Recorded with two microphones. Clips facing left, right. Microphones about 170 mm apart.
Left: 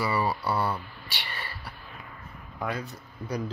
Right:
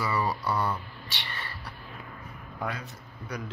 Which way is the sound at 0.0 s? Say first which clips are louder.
Left 2 dB; 10° left (ahead or behind).